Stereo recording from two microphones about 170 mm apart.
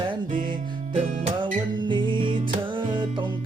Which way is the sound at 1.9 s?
30° right (ahead or behind).